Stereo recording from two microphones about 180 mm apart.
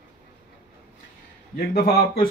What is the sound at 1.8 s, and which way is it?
Speech, 60° left (ahead or behind).